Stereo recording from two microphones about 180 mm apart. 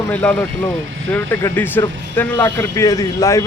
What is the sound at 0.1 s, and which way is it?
Speech, 10° left (ahead or behind).